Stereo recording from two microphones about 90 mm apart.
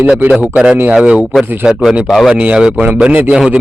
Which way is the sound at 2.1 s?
Centre (ahead or behind).